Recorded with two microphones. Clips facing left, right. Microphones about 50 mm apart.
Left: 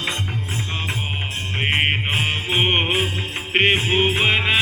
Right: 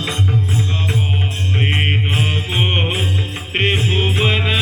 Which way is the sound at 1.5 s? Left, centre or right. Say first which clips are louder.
Even; left.